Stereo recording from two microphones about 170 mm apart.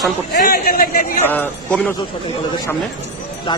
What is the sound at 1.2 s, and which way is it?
Speech, 10° left (ahead or behind).